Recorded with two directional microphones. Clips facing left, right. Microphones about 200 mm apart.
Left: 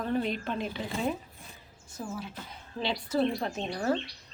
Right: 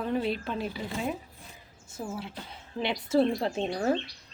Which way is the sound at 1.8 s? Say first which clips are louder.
Right 1 dB; 25° right (ahead or behind).